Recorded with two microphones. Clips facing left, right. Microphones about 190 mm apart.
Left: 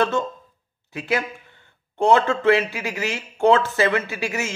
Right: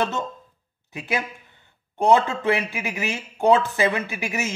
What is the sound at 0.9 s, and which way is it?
A man's voice, 15° right (ahead or behind).